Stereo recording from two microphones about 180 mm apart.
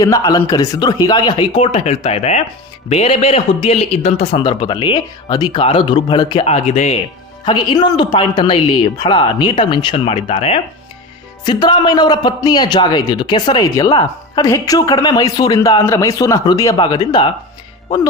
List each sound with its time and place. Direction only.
0.0 s a man's voice: 20° left (ahead or behind); by 7.0 s 35° left (ahead or behind)
7.4 s a man's voice: 25° left (ahead or behind)